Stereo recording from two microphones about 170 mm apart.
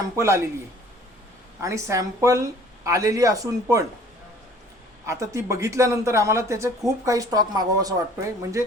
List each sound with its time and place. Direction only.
0.2 s a man's voice: 15° right (ahead or behind)
1.6 s a woman's voice: 20° right (ahead or behind)
5.0 s a man's voice: 20° right (ahead or behind)